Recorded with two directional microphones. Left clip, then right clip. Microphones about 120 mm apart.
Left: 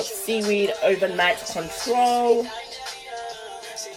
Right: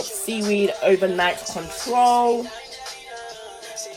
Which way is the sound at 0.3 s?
40° right (ahead or behind).